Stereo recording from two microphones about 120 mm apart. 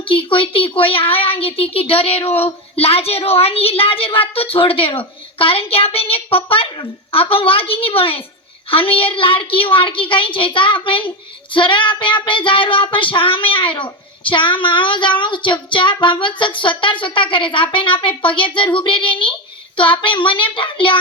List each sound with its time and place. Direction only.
0.1 s child singing: 45° left (ahead or behind)